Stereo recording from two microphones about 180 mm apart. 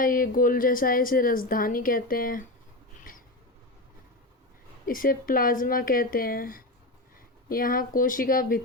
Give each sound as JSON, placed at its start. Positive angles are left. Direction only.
{"t": 0.0, "sound": "a woman's voice", "side_deg": 50}
{"t": 3.0, "sound": "a sound", "side_deg": 50}
{"t": 4.9, "sound": "a woman's voice", "side_deg": 50}